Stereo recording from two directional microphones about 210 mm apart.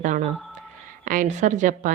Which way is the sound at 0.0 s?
35° right (ahead or behind).